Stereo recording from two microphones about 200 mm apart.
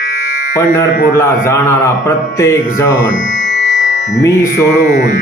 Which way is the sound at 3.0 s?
65° left (ahead or behind).